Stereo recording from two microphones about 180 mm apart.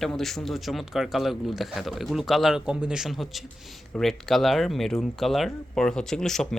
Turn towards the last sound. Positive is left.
turn(degrees=0)  # may be behind; listen again after turning